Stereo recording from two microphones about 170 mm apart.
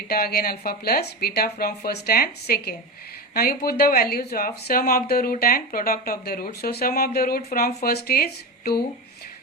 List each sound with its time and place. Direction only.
0.1 s speech: 65° left (ahead or behind)